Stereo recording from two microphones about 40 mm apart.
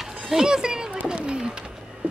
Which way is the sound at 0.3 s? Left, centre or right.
Centre.